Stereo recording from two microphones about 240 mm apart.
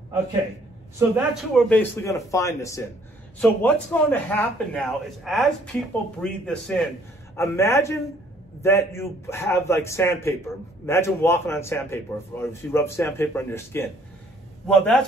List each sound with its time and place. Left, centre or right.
0.9 s a man's voice: centre